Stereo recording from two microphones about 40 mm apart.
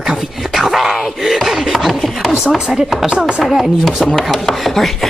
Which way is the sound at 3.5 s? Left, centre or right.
Centre.